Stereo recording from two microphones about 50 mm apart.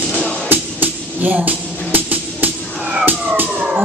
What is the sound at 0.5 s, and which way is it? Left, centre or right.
Music, right.